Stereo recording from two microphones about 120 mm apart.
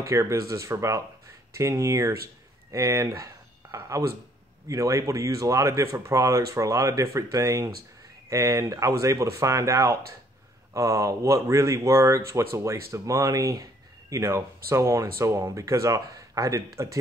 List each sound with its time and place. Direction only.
0.0 s speech: 25° right (ahead or behind)